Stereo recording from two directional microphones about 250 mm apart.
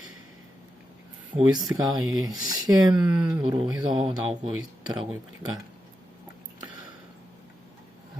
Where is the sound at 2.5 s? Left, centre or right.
Centre.